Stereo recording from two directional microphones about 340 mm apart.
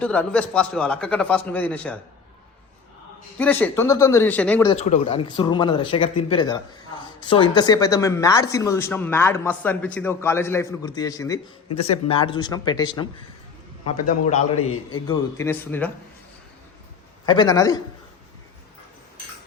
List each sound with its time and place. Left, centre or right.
0.0 s a man's voice: centre
3.3 s a man's voice: centre
4.7 s speech: centre
14.3 s a man's voice: left
15.0 s speech: centre
17.2 s speech: centre